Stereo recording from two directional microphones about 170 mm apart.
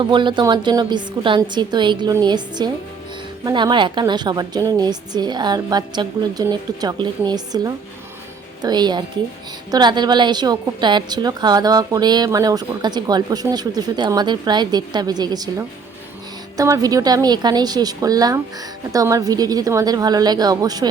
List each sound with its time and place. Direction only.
0.0 s a woman's voice: 30° right (ahead or behind)